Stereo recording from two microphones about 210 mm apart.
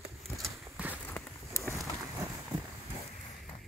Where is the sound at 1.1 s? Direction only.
10° left (ahead or behind).